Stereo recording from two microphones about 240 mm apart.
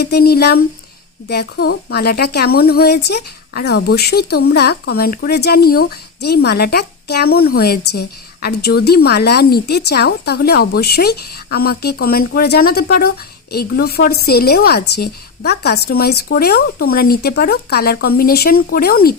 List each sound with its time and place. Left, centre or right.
0.0 s a woman's voice: left